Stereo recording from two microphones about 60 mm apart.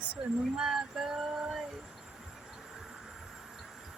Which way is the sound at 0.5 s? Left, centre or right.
Centre.